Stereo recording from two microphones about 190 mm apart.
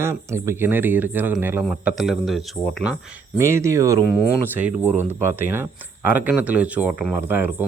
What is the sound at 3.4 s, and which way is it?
Speech, 15° right (ahead or behind).